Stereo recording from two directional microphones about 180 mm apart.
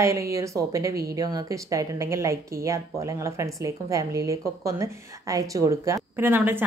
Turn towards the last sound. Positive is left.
turn(degrees=-10)  # may be behind; listen again after turning